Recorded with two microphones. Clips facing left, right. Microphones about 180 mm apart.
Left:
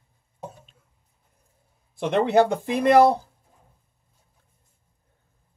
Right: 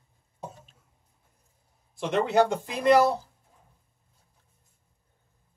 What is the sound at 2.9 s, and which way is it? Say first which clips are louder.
Speech: left 4 dB; 55° left (ahead or behind).